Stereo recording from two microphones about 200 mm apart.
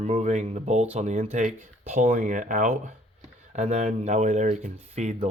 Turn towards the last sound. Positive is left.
turn(degrees=-35)  # may be behind; listen again after turning